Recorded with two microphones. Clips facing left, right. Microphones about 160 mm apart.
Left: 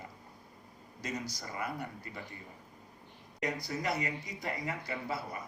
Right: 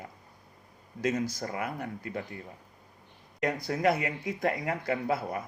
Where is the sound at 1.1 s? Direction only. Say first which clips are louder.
Right 8 dB; 50° right (ahead or behind).